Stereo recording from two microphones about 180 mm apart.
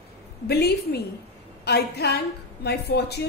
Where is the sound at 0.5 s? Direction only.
65° left (ahead or behind).